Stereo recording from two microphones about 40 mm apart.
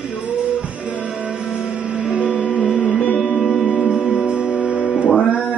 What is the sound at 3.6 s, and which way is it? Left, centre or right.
Music, centre.